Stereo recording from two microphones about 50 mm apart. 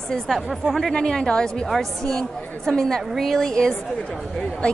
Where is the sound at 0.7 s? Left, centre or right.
Centre.